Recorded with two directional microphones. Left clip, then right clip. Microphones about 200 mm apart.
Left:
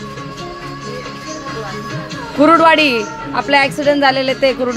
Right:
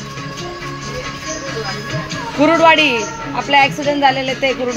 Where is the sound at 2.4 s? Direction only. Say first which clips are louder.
Left 1 dB; 25° left (ahead or behind).